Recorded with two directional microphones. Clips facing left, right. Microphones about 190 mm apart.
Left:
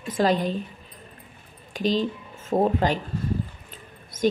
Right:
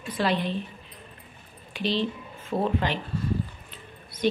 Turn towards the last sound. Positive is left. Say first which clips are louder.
# left 3 dB
turn(degrees=45)  # may be behind; listen again after turning